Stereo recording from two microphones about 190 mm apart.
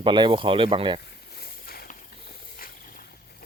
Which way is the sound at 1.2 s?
55° left (ahead or behind).